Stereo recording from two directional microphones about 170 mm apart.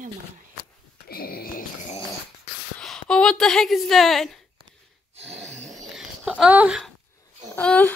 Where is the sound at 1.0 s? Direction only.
60° left (ahead or behind).